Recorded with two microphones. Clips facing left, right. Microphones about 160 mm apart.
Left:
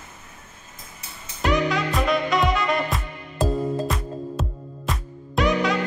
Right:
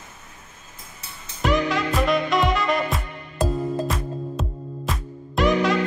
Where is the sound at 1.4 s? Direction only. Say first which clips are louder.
Even; centre (ahead or behind).